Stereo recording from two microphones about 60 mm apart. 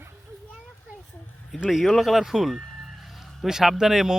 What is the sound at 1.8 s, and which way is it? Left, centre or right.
Speech, centre.